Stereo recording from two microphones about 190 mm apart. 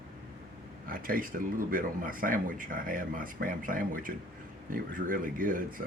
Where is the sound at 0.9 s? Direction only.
50° right (ahead or behind).